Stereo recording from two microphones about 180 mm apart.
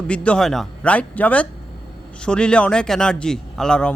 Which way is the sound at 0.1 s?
5° left (ahead or behind).